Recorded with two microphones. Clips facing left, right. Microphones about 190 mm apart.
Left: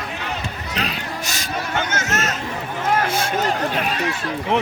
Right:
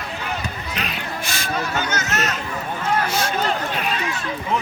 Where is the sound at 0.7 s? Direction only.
40° left (ahead or behind).